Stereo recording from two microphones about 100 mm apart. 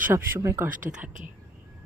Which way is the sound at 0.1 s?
25° right (ahead or behind).